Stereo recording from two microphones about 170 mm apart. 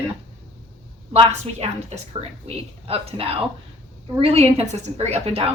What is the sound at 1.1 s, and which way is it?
A woman's voice, 35° right (ahead or behind).